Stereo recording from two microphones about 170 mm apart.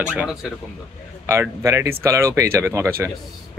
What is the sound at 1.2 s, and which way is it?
A man's voice, 15° right (ahead or behind).